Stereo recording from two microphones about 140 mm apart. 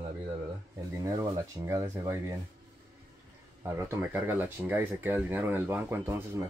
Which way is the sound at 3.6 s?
15° right (ahead or behind).